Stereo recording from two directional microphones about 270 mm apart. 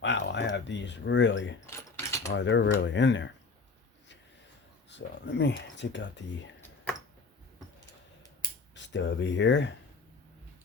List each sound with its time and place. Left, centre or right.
0.0 s speech: left
1.7 s mechanisms: centre
2.3 s speech: left
4.9 s speech: left
8.7 s speech: left